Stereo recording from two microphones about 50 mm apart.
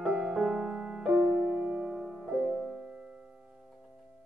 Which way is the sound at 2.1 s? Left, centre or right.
Centre.